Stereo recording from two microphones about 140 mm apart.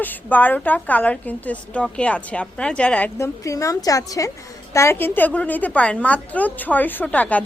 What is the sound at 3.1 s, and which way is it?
A woman's voice, 20° left (ahead or behind).